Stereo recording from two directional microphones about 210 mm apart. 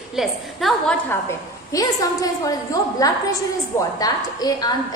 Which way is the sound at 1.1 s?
15° left (ahead or behind).